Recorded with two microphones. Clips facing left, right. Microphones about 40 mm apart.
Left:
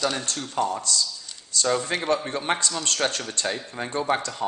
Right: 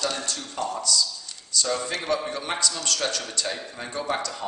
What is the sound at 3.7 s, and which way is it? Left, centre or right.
Speech, left.